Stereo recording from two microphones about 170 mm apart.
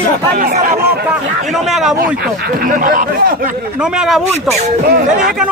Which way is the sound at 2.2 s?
55° right (ahead or behind).